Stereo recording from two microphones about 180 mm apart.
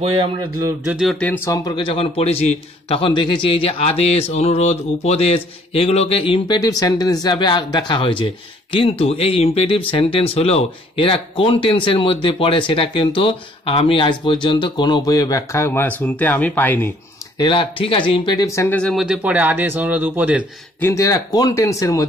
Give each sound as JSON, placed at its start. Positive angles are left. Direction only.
{"t": 0.2, "sound": "speech", "side_deg": -20}
{"t": 0.8, "sound": "speech", "side_deg": -5}
{"t": 1.2, "sound": "speech", "side_deg": 10}
{"t": 17.4, "sound": "speech", "side_deg": 30}
{"t": 20.8, "sound": "speech", "side_deg": 15}